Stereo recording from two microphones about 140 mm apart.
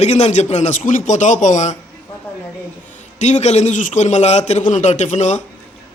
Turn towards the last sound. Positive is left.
turn(degrees=60)  # may be behind; listen again after turning